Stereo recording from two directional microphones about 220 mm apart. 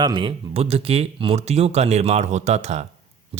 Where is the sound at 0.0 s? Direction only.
20° right (ahead or behind).